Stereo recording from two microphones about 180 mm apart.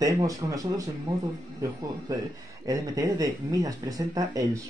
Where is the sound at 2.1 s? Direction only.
20° right (ahead or behind).